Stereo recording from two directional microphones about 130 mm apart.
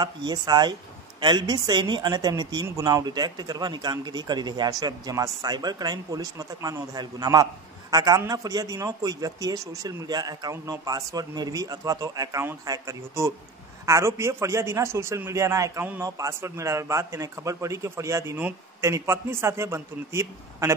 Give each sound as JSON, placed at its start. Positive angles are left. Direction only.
{"t": 0.0, "sound": "a man's voice", "side_deg": -30}